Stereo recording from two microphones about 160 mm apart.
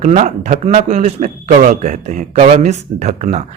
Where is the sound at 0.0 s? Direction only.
50° right (ahead or behind).